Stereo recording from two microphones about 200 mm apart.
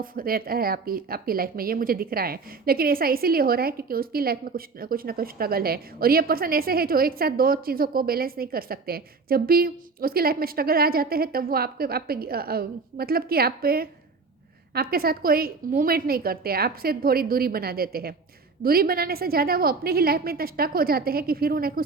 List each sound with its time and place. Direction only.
0.0 s speech: 45° right (ahead or behind)